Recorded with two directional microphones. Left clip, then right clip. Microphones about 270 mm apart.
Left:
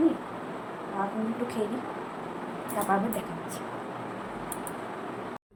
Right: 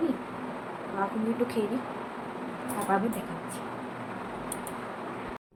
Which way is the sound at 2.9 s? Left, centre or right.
Centre.